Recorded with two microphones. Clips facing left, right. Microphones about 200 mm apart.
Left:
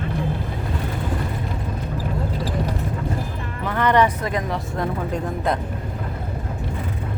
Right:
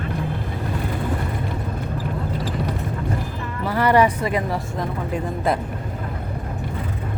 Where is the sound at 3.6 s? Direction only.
5° right (ahead or behind).